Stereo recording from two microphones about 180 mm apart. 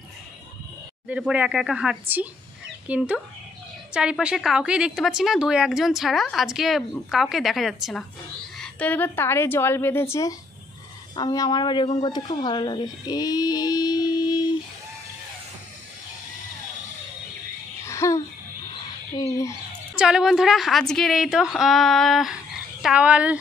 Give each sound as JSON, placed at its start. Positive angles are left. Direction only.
{"t": 1.0, "sound": "a woman's voice", "side_deg": -5}
{"t": 17.8, "sound": "babbling", "side_deg": 15}
{"t": 19.1, "sound": "a woman's voice", "side_deg": 15}
{"t": 20.0, "sound": "a woman's voice", "side_deg": -5}